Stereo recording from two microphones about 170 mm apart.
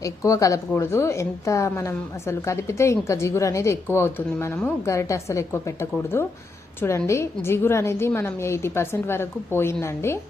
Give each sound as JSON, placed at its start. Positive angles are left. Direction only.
{"t": 0.0, "sound": "a woman's voice", "side_deg": 20}